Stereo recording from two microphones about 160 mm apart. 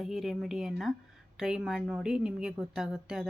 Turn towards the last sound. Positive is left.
turn(degrees=-5)  # may be behind; listen again after turning